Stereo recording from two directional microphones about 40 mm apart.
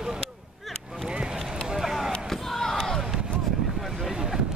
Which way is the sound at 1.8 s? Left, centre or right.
Centre.